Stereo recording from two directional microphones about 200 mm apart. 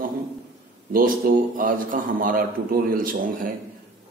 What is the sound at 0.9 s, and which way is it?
A man's voice, 45° right (ahead or behind).